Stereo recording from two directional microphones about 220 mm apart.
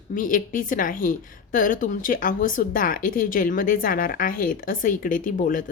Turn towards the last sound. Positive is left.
turn(degrees=35)  # may be behind; listen again after turning